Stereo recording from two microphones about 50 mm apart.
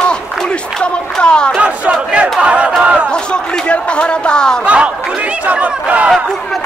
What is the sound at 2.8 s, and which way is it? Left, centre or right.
Crowd, right.